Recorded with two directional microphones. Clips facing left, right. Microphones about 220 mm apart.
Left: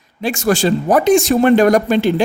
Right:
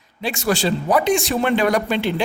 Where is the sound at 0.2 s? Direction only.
45° left (ahead or behind).